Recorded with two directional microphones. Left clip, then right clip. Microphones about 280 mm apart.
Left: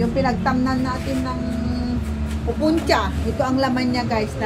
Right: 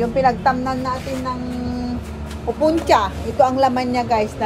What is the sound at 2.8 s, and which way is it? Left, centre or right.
Speech, right.